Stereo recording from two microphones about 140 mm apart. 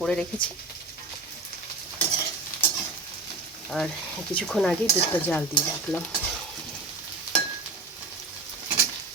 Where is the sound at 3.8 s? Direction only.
10° left (ahead or behind).